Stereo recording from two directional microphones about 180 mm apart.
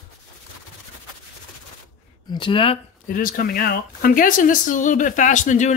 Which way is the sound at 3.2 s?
50° left (ahead or behind).